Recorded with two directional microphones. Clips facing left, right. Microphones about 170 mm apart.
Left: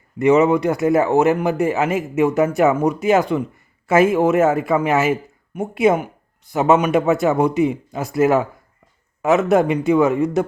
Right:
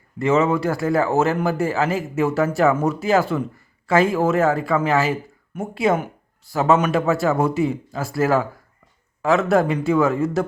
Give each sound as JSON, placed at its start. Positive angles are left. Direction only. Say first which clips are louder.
{"t": 0.2, "sound": "a man's voice", "louder": "left 4 dB", "side_deg": 20}
{"t": 5.5, "sound": "speech", "louder": "left 4 dB", "side_deg": 10}
{"t": 9.5, "sound": "speech", "louder": "left 3 dB", "side_deg": 20}